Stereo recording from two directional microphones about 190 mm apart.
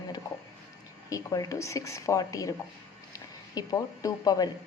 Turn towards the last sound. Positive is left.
turn(degrees=20)  # may be behind; listen again after turning